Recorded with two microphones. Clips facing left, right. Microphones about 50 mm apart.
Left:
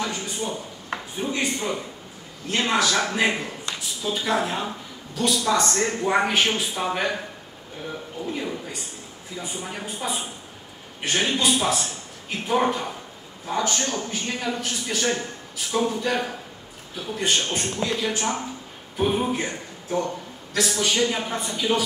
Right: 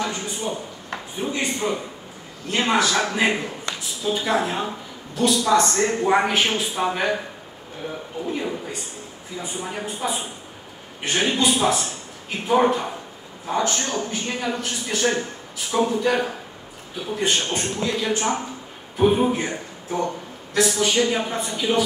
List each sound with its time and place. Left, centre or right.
0.0 s a sound: centre
1.2 s a man's voice: centre
8.3 s a man's voice: centre